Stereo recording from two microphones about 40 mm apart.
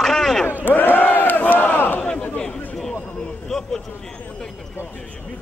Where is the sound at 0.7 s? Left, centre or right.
Left.